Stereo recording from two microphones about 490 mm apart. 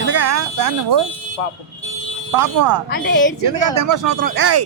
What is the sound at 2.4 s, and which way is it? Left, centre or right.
Speech, right.